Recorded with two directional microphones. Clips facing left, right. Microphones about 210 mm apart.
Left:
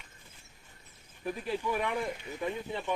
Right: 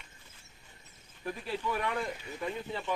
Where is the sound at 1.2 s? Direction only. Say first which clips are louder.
Left 2 dB; 15° left (ahead or behind).